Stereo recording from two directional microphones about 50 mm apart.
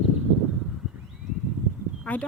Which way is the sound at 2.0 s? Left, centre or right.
Left.